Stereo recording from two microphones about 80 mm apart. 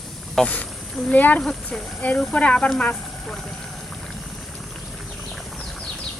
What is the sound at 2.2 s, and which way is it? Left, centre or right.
Speech, centre.